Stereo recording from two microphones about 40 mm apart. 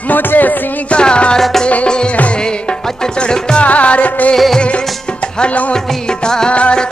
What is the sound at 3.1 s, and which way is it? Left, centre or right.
Music, left.